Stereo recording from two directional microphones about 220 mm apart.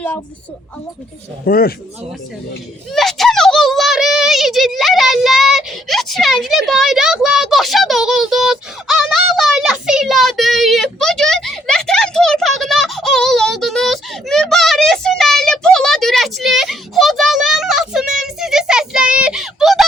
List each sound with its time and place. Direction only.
1.5 s a man's voice: 40° left (ahead or behind)
2.9 s a sound: centre (ahead or behind)
18.2 s child singing: centre (ahead or behind)